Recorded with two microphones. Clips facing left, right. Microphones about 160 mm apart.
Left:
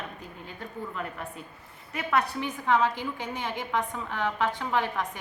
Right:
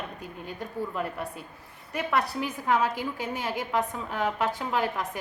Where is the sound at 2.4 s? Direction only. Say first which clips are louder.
Left 1 dB; 10° right (ahead or behind).